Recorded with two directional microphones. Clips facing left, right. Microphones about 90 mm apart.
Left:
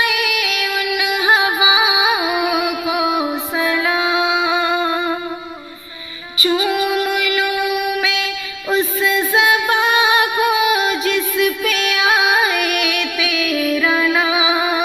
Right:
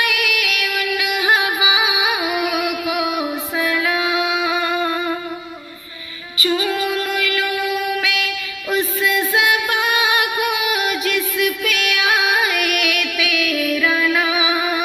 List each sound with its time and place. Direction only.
0.0 s music: 25° left (ahead or behind)
6.3 s music: 20° left (ahead or behind)